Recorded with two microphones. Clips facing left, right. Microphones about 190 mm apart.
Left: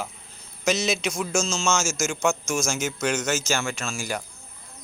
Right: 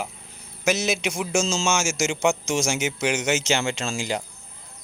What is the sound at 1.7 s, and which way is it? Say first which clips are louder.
Speech: right 1 dB; 10° right (ahead or behind).